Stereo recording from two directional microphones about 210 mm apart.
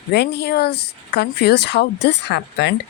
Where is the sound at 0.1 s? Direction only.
55° left (ahead or behind).